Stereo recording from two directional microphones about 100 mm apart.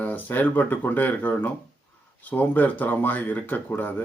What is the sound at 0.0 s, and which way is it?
Speech, 15° left (ahead or behind).